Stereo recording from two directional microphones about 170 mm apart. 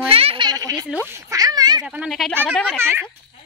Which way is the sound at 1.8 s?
5° right (ahead or behind).